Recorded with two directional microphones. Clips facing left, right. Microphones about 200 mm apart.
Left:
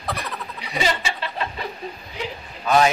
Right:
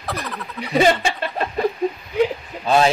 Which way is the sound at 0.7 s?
50° right (ahead or behind).